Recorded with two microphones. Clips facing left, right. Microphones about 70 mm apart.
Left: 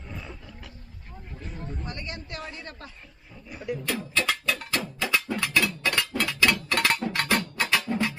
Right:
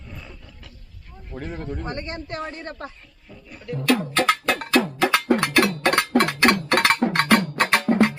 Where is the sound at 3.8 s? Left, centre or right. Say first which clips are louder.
Right 10 dB; right.